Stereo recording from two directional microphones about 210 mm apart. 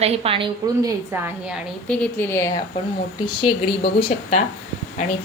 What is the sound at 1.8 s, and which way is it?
Speech, 10° left (ahead or behind).